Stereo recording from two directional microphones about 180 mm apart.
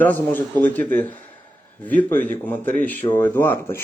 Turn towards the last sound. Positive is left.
turn(degrees=15)  # may be behind; listen again after turning